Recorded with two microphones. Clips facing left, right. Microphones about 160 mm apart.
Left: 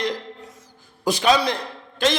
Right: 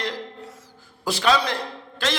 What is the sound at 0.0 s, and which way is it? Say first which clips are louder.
Music: left 3 dB; 20° left (ahead or behind).